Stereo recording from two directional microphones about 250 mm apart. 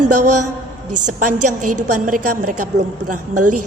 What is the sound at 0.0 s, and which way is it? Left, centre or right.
A woman's voice, right.